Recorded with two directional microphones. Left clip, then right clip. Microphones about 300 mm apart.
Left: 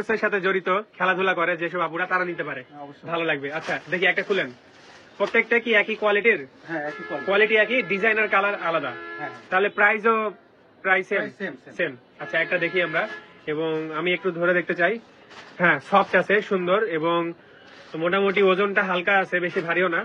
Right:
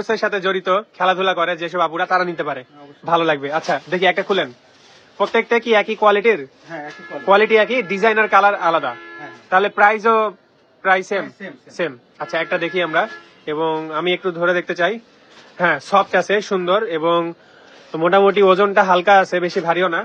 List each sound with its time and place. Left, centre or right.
0.0 s speech: centre
3.3 s speech: right
3.5 s speech: centre
3.9 s speech: right
5.1 s speech: centre